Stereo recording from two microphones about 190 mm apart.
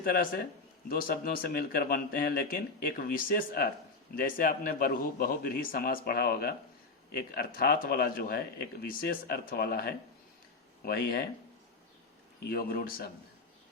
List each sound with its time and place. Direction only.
0.0 s speech: 50° left (ahead or behind)
12.5 s speech: 50° left (ahead or behind)